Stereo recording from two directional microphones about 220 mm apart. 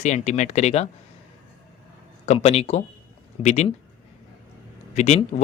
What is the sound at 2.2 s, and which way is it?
Speech, 30° left (ahead or behind).